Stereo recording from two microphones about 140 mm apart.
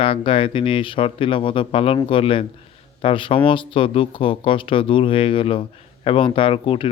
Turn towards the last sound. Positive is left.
turn(degrees=40)  # may be behind; listen again after turning